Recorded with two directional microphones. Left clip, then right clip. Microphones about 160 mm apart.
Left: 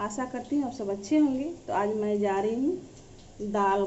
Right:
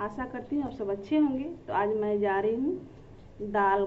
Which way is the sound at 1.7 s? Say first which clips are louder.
Even; 30° left (ahead or behind).